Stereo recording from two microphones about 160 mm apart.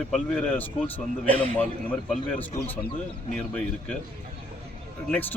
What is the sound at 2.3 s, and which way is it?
Speech, 10° left (ahead or behind).